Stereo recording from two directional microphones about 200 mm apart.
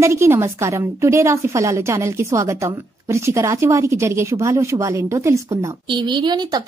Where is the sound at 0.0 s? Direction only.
15° right (ahead or behind).